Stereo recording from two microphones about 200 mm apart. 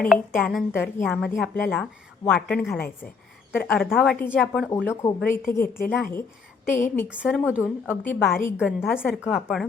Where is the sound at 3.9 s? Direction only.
5° left (ahead or behind).